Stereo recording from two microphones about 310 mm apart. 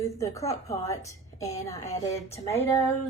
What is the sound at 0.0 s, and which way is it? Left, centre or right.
A woman's voice, centre.